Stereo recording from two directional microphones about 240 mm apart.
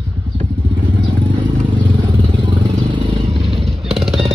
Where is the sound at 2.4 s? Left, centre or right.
Centre.